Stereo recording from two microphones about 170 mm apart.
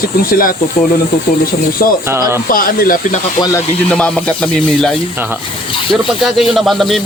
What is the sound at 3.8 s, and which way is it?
Speech, 5° left (ahead or behind).